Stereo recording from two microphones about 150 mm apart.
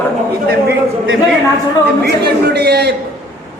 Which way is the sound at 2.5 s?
90° right.